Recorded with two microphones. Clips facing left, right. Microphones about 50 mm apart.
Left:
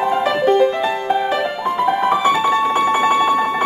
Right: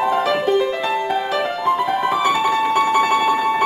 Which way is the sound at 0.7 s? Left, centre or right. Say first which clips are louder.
Left 1 dB; centre.